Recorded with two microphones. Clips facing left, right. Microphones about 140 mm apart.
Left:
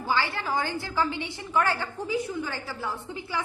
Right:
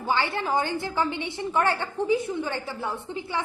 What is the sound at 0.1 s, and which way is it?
A woman's voice, 20° right (ahead or behind).